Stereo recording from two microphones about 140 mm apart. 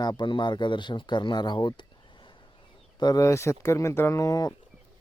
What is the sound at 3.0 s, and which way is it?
Speech, 25° left (ahead or behind).